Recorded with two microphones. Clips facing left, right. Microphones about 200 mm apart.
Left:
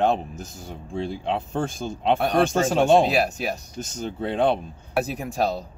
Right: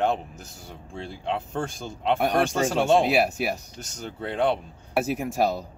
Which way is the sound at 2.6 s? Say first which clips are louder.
Left 3 dB; 15° left (ahead or behind).